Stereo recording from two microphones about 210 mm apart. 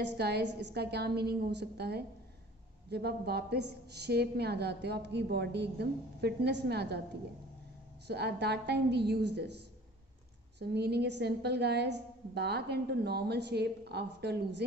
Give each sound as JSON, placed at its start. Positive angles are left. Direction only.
{"t": 0.0, "sound": "a woman's voice", "side_deg": -50}
{"t": 8.1, "sound": "a woman's voice", "side_deg": -50}
{"t": 10.6, "sound": "a woman's voice", "side_deg": -50}